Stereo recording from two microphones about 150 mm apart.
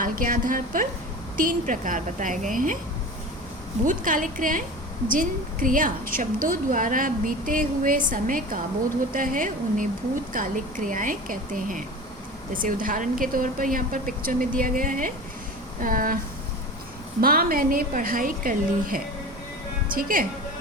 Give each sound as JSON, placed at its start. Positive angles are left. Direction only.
{"t": 0.0, "sound": "a woman's voice", "side_deg": -65}
{"t": 3.8, "sound": "a woman's voice", "side_deg": -60}
{"t": 17.2, "sound": "a woman's voice", "side_deg": -75}